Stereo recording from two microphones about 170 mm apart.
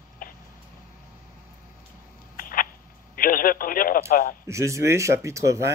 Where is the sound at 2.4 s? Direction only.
55° left (ahead or behind).